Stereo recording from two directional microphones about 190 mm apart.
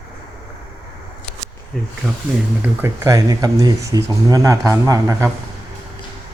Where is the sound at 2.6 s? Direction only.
10° right (ahead or behind).